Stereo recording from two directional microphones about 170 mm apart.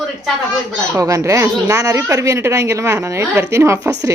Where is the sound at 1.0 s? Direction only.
20° right (ahead or behind).